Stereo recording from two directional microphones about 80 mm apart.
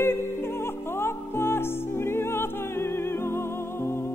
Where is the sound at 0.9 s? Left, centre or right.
Left.